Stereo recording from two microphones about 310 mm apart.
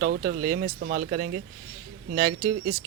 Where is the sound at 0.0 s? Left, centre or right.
Right.